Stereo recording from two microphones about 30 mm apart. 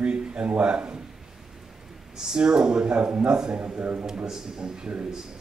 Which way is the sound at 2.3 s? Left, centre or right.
Right.